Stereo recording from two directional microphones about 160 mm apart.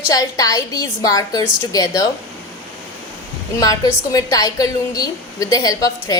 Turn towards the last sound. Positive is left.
turn(degrees=20)  # may be behind; listen again after turning